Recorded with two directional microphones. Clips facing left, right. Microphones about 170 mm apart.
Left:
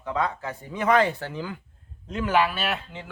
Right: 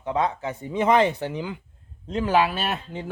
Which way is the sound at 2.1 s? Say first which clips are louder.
Right 2 dB; 35° right (ahead or behind).